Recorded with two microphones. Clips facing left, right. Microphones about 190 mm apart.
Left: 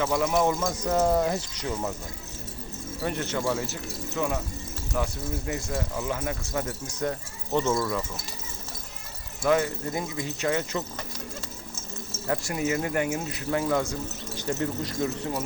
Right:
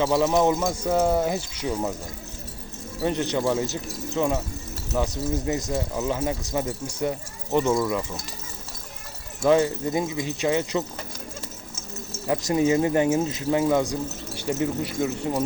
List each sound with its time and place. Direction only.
0.0 s speech: 25° right (ahead or behind)
0.7 s speech: 10° right (ahead or behind)
3.0 s speech: 20° right (ahead or behind)
9.5 s speech: 20° right (ahead or behind)
12.5 s speech: 25° right (ahead or behind)